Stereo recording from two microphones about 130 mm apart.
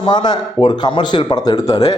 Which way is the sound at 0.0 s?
35° left (ahead or behind).